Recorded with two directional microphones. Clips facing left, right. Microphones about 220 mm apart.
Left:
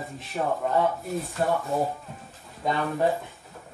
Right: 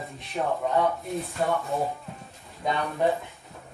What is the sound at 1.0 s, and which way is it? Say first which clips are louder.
Speech: left 1 dB; centre (ahead or behind).